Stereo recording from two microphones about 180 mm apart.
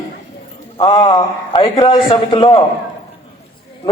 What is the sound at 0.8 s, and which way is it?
A man's voice, 30° left (ahead or behind).